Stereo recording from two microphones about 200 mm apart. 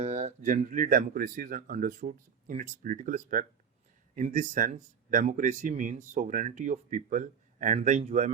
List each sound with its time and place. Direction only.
0.0 s speech: 35° right (ahead or behind)